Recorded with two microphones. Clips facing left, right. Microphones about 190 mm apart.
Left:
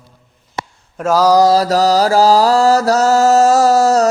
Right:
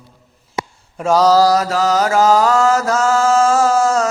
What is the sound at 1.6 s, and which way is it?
Mantra, 35° left (ahead or behind).